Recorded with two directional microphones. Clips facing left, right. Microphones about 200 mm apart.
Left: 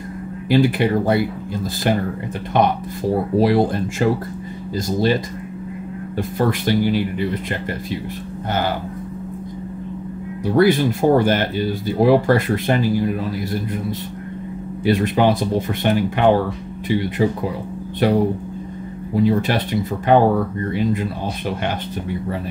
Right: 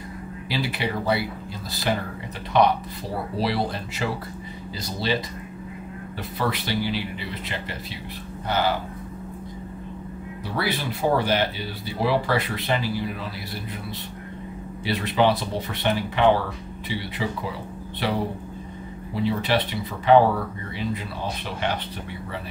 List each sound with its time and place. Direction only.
0.5 s speech: 50° left (ahead or behind)
8.5 s speech: 50° left (ahead or behind)
10.4 s speech: 50° left (ahead or behind)